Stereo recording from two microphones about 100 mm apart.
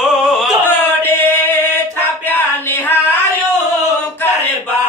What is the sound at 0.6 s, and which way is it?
Singing, 20° left (ahead or behind).